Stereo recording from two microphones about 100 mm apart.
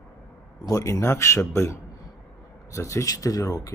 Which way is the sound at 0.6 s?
35° left (ahead or behind).